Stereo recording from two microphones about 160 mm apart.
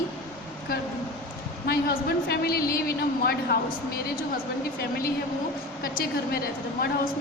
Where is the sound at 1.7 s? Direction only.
75° left (ahead or behind).